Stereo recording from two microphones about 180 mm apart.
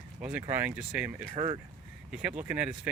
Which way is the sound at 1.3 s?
30° right (ahead or behind).